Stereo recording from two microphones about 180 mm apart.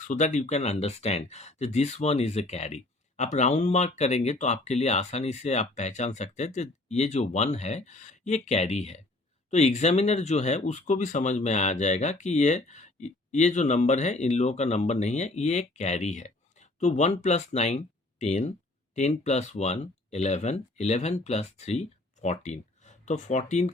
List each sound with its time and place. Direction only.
0.0 s speech: 40° left (ahead or behind)